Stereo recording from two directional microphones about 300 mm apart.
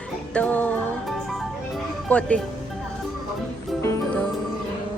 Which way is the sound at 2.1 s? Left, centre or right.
Centre.